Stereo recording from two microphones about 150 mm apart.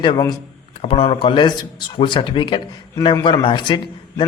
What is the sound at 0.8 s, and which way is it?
A man's voice, 40° left (ahead or behind).